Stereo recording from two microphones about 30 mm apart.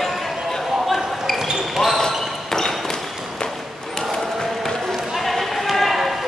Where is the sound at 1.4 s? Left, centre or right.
Centre.